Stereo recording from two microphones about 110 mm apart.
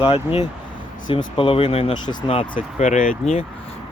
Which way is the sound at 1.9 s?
50° left (ahead or behind).